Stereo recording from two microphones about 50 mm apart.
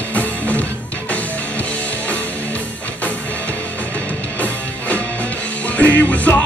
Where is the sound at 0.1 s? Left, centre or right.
Left.